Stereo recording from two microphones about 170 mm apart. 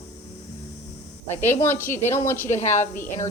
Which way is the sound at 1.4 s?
15° left (ahead or behind).